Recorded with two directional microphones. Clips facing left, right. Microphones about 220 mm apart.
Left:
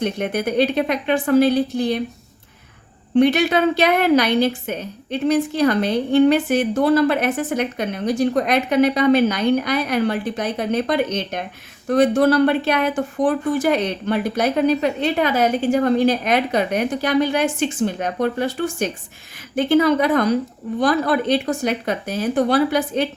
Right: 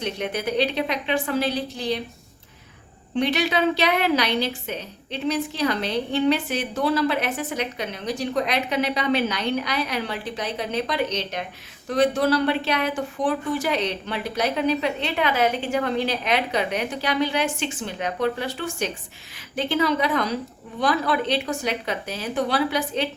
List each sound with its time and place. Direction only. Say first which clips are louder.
0.0 s a woman's voice: left 5 dB; 50° left (ahead or behind)
3.2 s a woman's voice: left 7 dB; 50° left (ahead or behind)